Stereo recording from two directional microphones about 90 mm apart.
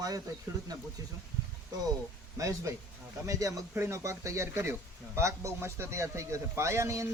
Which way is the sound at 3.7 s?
30° right (ahead or behind).